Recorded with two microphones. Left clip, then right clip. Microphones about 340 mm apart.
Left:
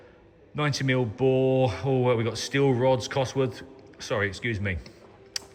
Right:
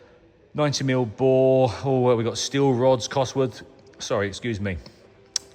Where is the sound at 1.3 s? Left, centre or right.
Right.